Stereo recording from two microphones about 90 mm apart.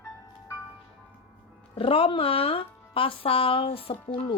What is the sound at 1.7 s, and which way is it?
Speech, 90° left.